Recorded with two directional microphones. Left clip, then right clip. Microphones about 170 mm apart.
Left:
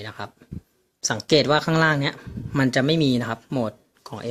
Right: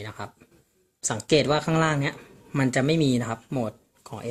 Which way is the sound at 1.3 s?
15° left (ahead or behind).